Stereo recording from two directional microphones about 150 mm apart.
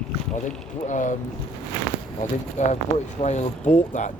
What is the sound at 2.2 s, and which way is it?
Speech, 55° left (ahead or behind).